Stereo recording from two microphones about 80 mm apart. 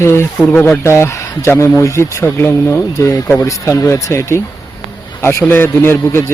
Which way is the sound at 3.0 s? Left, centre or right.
Left.